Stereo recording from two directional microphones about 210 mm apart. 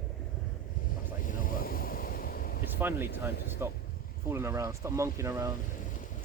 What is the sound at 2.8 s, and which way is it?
Speech, 10° right (ahead or behind).